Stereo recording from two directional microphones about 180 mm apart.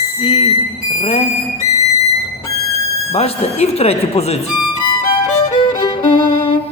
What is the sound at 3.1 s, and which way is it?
Speech, 35° left (ahead or behind).